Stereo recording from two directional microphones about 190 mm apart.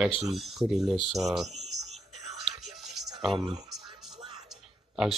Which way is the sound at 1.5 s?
35° right (ahead or behind).